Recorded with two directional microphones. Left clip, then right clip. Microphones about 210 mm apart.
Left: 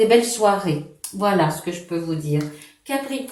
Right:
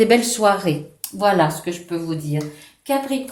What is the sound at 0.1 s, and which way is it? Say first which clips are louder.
Speech: even; 45° right (ahead or behind).